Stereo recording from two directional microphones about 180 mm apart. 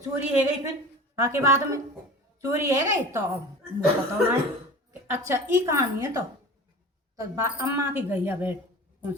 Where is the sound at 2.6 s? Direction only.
15° right (ahead or behind).